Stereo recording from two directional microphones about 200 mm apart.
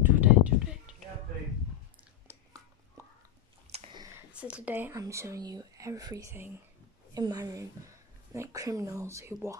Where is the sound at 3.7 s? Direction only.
30° right (ahead or behind).